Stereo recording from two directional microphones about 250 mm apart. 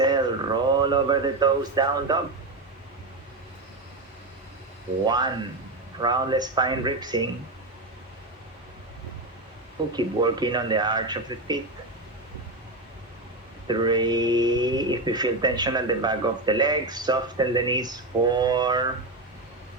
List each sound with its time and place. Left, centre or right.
0.0 s a sound: centre
5.0 s speech: centre
9.9 s speech: centre
13.7 s speech: centre